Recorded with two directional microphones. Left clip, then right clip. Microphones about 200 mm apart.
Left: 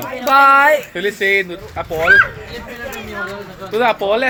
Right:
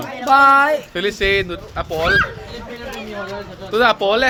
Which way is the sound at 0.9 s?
10° right (ahead or behind).